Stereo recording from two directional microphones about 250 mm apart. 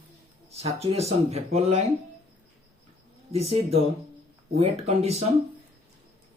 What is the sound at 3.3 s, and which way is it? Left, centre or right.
Speech, right.